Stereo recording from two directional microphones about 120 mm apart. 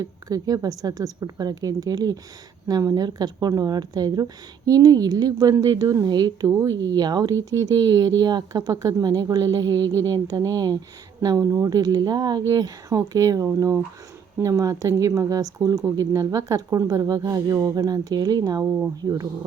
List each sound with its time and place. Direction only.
0.0 s speech: 30° right (ahead or behind)